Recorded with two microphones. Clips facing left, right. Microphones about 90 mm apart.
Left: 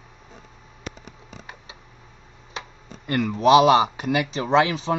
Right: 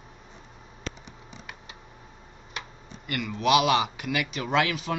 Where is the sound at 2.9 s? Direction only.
40° left (ahead or behind).